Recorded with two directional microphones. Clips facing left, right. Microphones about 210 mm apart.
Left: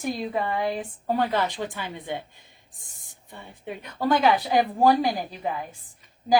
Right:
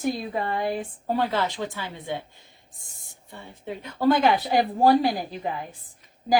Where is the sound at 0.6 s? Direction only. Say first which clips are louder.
Even; 10° right (ahead or behind).